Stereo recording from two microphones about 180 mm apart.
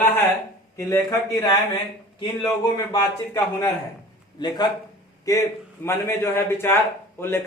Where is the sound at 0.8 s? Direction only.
15° left (ahead or behind).